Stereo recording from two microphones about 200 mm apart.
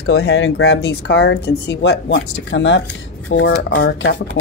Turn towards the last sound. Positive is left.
turn(degrees=65)  # may be behind; listen again after turning